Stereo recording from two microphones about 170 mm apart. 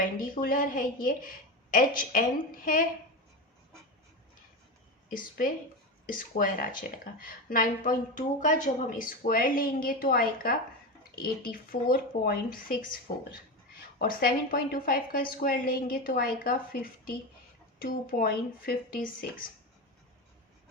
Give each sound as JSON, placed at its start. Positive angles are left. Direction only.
{"t": 0.0, "sound": "a woman's voice", "side_deg": 55}
{"t": 5.0, "sound": "a woman's voice", "side_deg": 55}